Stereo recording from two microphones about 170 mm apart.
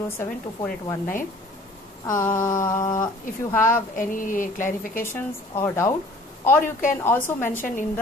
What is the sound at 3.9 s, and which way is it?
Speech, 50° left (ahead or behind).